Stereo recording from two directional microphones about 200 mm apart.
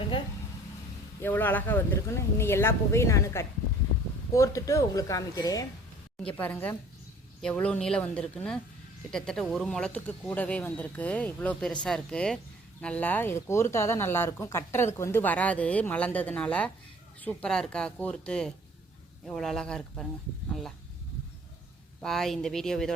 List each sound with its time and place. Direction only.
1.2 s speech: 10° left (ahead or behind)
22.0 s speech: centre (ahead or behind)